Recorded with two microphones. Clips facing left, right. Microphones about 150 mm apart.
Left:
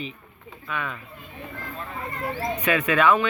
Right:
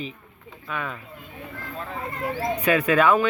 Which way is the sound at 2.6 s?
35° right (ahead or behind).